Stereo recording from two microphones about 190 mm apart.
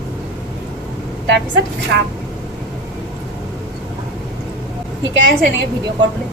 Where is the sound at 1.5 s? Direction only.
70° right (ahead or behind).